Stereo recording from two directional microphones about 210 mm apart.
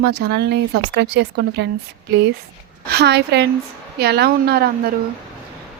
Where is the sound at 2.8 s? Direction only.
55° right (ahead or behind).